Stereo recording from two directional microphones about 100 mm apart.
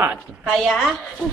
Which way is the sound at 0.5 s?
5° left (ahead or behind).